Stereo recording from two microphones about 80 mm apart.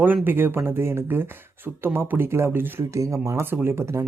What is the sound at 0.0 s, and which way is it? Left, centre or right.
Speech, right.